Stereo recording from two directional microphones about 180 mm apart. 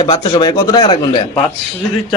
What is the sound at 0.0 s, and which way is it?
Speech, 25° left (ahead or behind).